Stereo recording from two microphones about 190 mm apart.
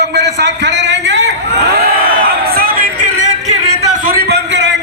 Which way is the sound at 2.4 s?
50° right (ahead or behind).